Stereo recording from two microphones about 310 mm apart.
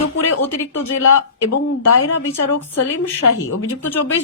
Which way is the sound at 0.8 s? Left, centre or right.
Left.